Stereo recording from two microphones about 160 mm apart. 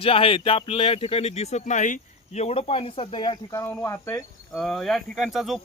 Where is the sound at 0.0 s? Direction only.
35° left (ahead or behind); by 4.2 s 15° left (ahead or behind).